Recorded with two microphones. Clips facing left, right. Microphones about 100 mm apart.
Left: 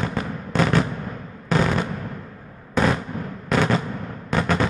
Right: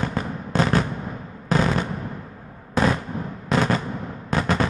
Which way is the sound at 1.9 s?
5° right (ahead or behind).